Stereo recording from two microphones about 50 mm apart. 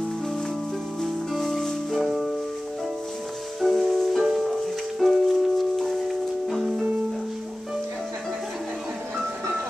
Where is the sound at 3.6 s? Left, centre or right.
Centre.